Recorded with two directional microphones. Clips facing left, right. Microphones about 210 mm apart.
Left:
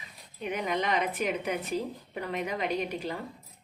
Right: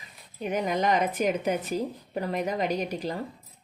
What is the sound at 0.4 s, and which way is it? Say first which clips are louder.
A woman's voice: right 4 dB; 45° right (ahead or behind).